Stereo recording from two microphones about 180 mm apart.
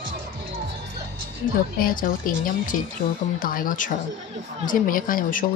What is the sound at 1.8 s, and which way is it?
Speech, 50° left (ahead or behind).